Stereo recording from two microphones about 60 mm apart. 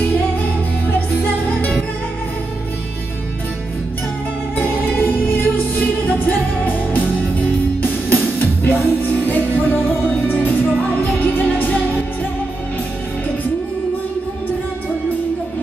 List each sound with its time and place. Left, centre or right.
0.4 s music: left
4.6 s music: left